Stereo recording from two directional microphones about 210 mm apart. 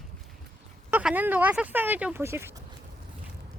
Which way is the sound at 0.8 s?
10° right (ahead or behind).